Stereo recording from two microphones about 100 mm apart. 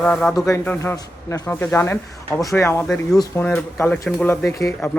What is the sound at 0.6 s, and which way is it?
Speech, 20° left (ahead or behind).